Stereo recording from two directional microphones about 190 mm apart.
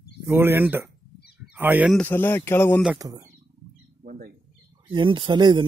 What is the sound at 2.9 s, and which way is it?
Speech, 20° right (ahead or behind).